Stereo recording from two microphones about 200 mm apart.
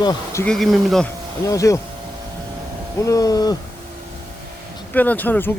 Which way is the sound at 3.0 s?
15° left (ahead or behind).